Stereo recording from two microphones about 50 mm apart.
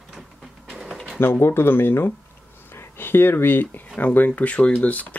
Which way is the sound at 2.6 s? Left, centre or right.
Left.